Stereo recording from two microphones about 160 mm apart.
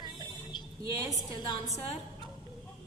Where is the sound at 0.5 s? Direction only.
30° left (ahead or behind).